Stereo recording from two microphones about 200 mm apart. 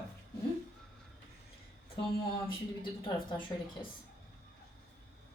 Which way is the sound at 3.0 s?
25° left (ahead or behind).